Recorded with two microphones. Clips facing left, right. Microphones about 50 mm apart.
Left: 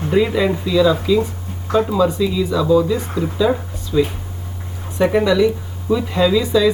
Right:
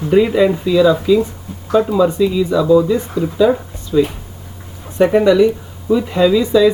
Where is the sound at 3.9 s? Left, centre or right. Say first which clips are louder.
Right 3 dB; centre.